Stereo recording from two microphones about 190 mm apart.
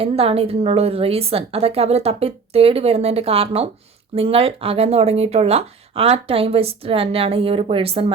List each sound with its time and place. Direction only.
0.0 s speech: 30° right (ahead or behind)